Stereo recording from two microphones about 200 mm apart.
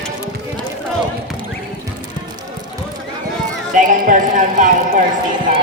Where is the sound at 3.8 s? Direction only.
40° right (ahead or behind).